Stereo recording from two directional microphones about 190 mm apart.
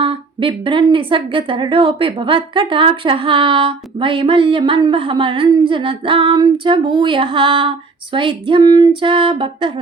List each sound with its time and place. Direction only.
0.0 s a woman's voice: 30° right (ahead or behind)